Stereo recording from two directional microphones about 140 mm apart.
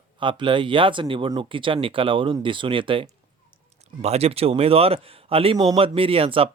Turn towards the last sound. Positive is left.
turn(degrees=-40)  # may be behind; listen again after turning